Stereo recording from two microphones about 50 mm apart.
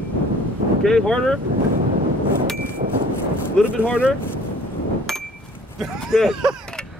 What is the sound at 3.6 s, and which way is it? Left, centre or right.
Speech, centre.